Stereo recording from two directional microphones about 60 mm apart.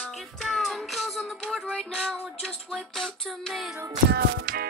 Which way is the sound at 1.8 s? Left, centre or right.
Centre.